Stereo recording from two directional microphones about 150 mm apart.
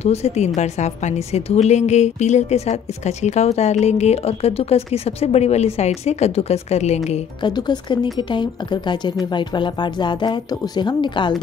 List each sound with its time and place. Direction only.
0.0 s a woman's voice: 45° left (ahead or behind)
7.4 s speech: 30° left (ahead or behind)